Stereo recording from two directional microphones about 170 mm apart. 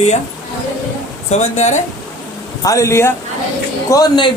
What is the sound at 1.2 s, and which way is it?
Speech, 40° left (ahead or behind).